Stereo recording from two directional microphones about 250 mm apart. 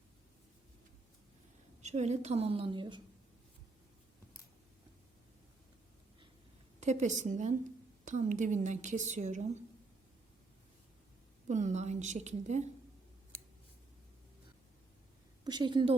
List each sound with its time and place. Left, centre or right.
1.8 s speech: right
6.7 s a woman's voice: right
11.4 s speech: right
15.4 s speech: centre